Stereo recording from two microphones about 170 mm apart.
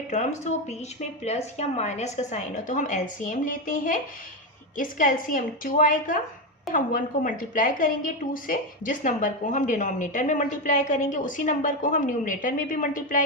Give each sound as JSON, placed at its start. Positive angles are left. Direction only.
{"t": 0.1, "sound": "a woman's voice", "side_deg": 45}